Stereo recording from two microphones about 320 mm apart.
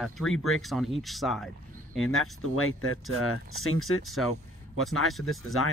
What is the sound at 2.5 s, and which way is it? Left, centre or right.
Speech, left.